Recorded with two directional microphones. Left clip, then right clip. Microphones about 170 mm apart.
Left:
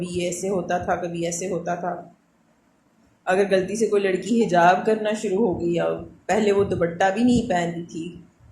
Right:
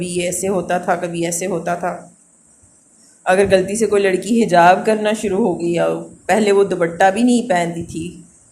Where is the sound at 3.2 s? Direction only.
55° right (ahead or behind).